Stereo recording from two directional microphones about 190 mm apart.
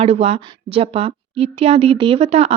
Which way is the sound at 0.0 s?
35° right (ahead or behind).